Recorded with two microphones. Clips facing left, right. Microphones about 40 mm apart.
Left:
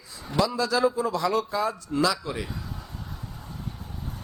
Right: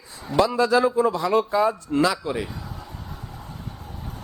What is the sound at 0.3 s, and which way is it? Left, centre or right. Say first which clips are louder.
A man's voice: right 5 dB; right.